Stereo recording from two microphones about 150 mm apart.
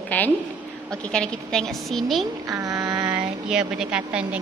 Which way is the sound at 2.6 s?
25° right (ahead or behind).